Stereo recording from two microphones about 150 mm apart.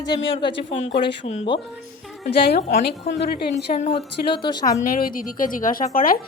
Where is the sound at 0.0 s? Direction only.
30° left (ahead or behind).